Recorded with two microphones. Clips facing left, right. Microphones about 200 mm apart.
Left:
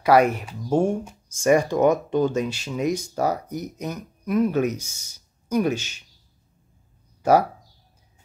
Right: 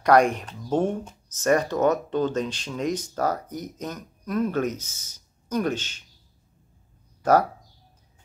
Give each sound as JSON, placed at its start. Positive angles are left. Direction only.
{"t": 0.0, "sound": "speech", "side_deg": 5}
{"t": 7.2, "sound": "speech", "side_deg": 10}